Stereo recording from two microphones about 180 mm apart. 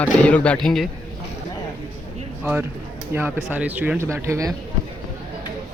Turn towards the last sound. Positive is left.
turn(degrees=-15)  # may be behind; listen again after turning